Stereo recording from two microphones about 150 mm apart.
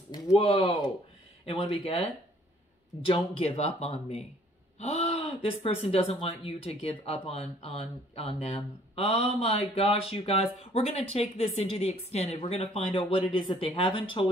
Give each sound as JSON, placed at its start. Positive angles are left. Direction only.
{"t": 0.3, "sound": "speech", "side_deg": 40}
{"t": 3.1, "sound": "speech", "side_deg": 40}